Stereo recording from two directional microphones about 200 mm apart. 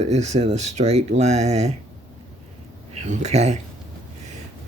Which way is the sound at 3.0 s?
35° right (ahead or behind).